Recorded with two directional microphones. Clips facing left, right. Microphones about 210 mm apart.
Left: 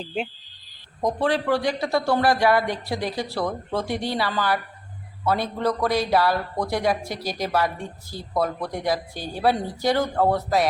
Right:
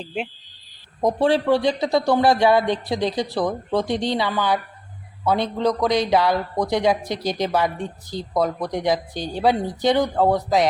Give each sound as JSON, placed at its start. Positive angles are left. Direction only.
{"t": 0.0, "sound": "speech", "side_deg": -5}
{"t": 1.0, "sound": "a man's voice", "side_deg": -25}